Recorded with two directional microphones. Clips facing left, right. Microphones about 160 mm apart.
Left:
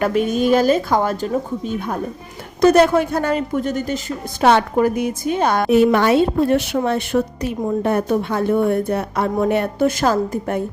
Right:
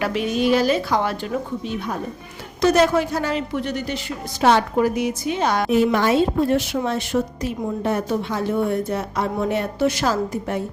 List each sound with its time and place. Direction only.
0.0 s a woman's voice: 45° left (ahead or behind)